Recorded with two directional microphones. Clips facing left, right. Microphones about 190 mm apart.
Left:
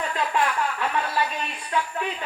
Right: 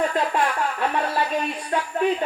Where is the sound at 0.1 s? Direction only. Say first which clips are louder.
Right 2 dB; 40° right (ahead or behind).